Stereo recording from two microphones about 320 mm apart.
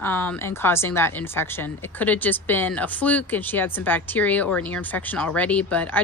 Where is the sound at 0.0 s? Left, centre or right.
Centre.